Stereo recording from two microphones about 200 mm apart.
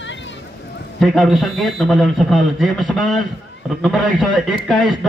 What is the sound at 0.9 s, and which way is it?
A man's voice, centre (ahead or behind).